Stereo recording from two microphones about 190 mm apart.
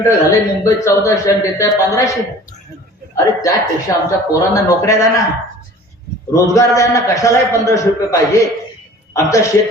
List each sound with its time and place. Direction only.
0.0 s a man's voice: 15° left (ahead or behind)
3.4 s a man's voice: 15° left (ahead or behind)
6.3 s a man's voice: 15° left (ahead or behind)